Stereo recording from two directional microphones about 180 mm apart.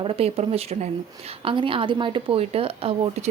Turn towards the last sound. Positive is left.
turn(degrees=-30)  # may be behind; listen again after turning